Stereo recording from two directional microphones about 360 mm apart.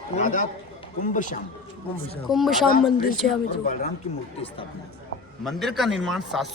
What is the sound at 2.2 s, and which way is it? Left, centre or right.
Speech, centre.